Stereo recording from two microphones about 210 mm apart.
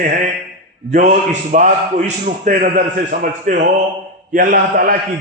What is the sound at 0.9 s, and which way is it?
A man's voice, 35° right (ahead or behind).